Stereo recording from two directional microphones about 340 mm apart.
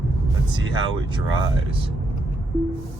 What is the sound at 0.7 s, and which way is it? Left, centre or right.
Speech, centre.